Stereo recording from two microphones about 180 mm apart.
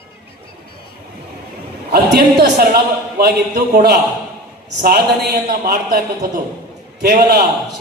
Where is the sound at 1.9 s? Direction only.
60° right (ahead or behind).